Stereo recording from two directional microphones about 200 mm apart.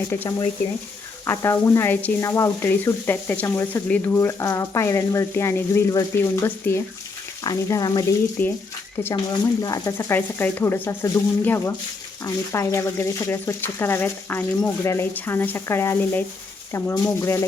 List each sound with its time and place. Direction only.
0.1 s speech: 15° left (ahead or behind)
9.6 s speech: 20° left (ahead or behind)